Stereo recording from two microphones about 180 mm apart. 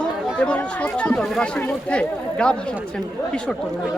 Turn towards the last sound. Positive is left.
turn(degrees=5)  # may be behind; listen again after turning